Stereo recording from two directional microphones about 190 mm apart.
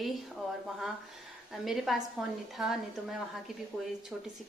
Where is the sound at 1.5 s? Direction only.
Centre (ahead or behind).